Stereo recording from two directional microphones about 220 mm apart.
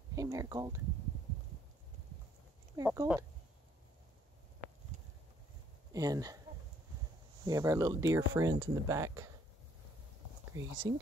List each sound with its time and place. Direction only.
0.1 s speech: 15° right (ahead or behind)
2.7 s speech: 15° right (ahead or behind)
5.9 s speech: 15° right (ahead or behind)
7.4 s speech: 15° right (ahead or behind)
10.5 s speech: 15° right (ahead or behind)